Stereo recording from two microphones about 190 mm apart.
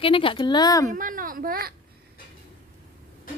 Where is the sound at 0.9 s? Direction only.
45° right (ahead or behind).